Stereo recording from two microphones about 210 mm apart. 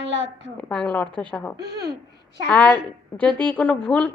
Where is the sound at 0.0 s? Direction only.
60° right (ahead or behind).